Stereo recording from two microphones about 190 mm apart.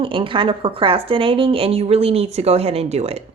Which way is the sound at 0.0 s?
25° right (ahead or behind).